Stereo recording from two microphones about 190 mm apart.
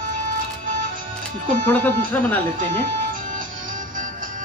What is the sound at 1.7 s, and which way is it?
Speech, 10° left (ahead or behind).